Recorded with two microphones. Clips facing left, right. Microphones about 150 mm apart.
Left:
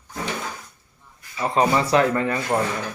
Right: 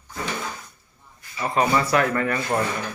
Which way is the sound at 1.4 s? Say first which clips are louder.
Left 2 dB; 25° left (ahead or behind).